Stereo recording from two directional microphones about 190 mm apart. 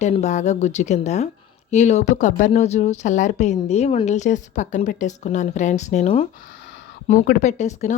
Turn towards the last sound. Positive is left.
turn(degrees=35)  # may be behind; listen again after turning